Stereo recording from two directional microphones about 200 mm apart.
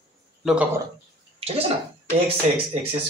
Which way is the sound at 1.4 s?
30° right (ahead or behind).